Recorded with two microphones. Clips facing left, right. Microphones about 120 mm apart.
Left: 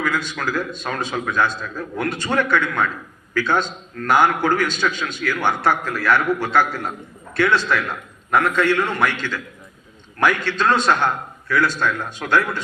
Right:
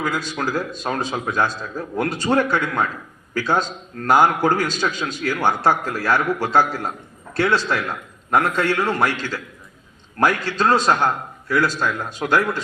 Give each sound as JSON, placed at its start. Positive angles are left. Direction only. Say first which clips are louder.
{"t": 0.0, "sound": "a man's voice", "louder": "even", "side_deg": -40}
{"t": 11.8, "sound": "a man's voice", "louder": "even", "side_deg": -10}